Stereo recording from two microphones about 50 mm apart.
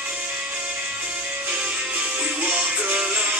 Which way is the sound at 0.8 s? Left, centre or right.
Right.